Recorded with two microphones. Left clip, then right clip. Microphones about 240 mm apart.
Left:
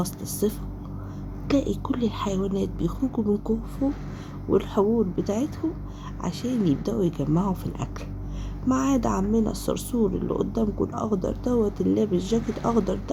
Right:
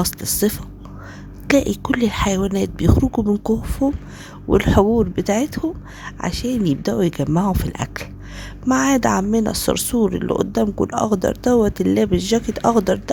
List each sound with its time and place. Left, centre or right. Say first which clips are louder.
0.0 s speech: right 7 dB; right